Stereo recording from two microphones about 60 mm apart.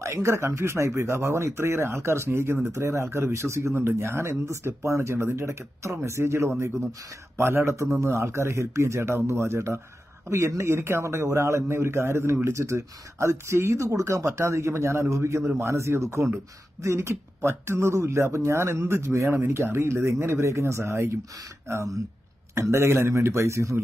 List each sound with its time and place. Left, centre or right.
0.0 s speech: right
22.5 s speech: right